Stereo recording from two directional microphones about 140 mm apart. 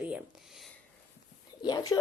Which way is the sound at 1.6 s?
25° left (ahead or behind).